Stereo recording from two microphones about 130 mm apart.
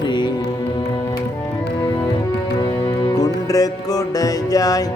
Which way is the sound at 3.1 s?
30° left (ahead or behind).